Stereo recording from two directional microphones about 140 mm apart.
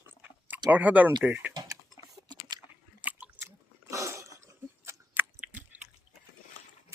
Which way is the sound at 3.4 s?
20° right (ahead or behind).